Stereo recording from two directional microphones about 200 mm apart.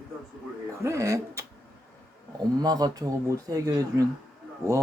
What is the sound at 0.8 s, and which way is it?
Speech, 15° right (ahead or behind).